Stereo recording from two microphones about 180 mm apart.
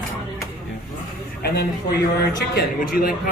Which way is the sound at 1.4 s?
60° left (ahead or behind).